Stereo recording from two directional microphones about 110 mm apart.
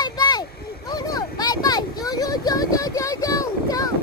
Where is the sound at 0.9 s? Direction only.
35° left (ahead or behind).